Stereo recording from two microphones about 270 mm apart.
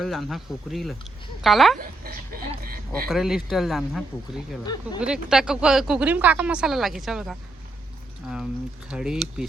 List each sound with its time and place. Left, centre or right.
0.0 s speech: centre
1.8 s speech: right
2.5 s a sound: right
3.1 s speech: centre
4.6 s speech: centre
4.9 s speech: centre